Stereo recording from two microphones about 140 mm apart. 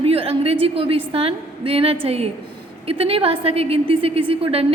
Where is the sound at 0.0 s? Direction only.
45° right (ahead or behind).